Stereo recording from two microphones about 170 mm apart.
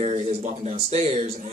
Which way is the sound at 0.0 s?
35° right (ahead or behind).